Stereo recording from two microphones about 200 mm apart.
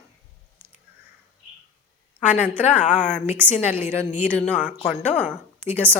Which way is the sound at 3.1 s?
10° right (ahead or behind).